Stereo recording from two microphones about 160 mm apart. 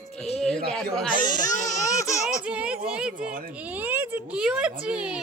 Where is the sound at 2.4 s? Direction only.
10° right (ahead or behind).